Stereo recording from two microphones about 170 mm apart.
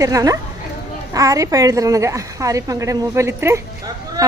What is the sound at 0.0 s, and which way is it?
A woman's voice, 20° right (ahead or behind).